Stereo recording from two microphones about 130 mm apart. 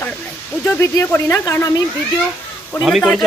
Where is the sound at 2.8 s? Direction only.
Centre (ahead or behind).